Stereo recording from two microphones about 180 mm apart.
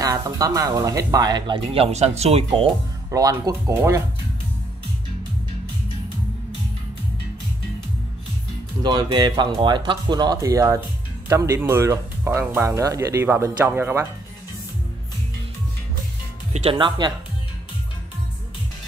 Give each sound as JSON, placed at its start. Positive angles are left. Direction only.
{"t": 0.0, "sound": "speech", "side_deg": -20}
{"t": 3.1, "sound": "speech", "side_deg": -20}
{"t": 8.8, "sound": "speech", "side_deg": -25}
{"t": 16.5, "sound": "speech", "side_deg": -30}